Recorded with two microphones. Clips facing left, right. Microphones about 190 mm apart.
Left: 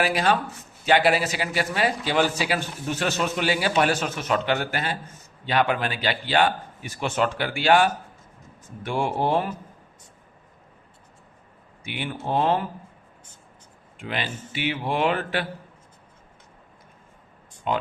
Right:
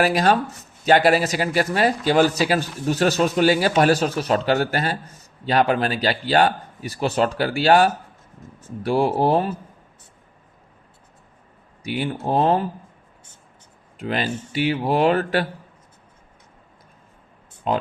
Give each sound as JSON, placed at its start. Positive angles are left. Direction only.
{"t": 0.0, "sound": "speech", "side_deg": -40}
{"t": 11.8, "sound": "speech", "side_deg": -40}
{"t": 14.0, "sound": "speech", "side_deg": -40}
{"t": 17.7, "sound": "speech", "side_deg": -35}